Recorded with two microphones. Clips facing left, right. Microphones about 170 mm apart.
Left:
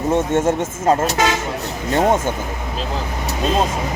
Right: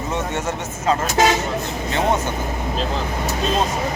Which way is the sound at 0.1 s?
50° left (ahead or behind).